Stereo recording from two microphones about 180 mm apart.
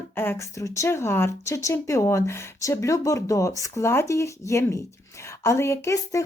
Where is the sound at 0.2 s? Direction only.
15° left (ahead or behind).